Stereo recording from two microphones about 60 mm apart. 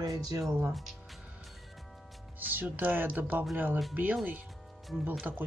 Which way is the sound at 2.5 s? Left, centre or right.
Right.